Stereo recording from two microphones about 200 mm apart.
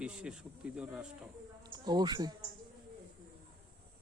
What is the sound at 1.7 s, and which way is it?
Speech, 20° right (ahead or behind).